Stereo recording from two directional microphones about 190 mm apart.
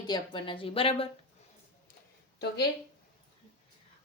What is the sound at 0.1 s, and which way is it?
A woman's voice, 25° left (ahead or behind).